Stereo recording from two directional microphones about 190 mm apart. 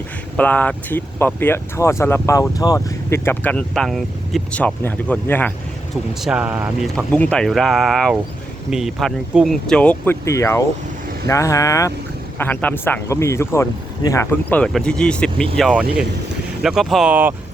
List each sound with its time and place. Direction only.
0.3 s speech: 10° left (ahead or behind)
6.2 s speech: 5° right (ahead or behind)
6.9 s speech: 5° left (ahead or behind)
14.6 s speech: 5° left (ahead or behind)